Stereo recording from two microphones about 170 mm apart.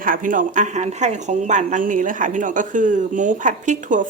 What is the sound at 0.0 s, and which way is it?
A woman's voice, 55° right (ahead or behind).